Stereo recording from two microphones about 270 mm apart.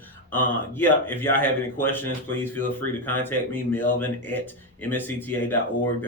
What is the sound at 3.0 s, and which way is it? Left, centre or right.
Speech, centre.